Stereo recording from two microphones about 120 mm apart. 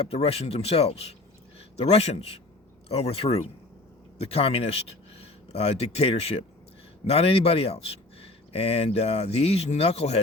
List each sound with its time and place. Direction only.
0.0 s speech: 55° left (ahead or behind)